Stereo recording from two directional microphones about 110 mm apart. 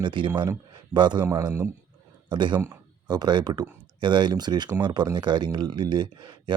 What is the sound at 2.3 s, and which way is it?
Speech, 45° right (ahead or behind).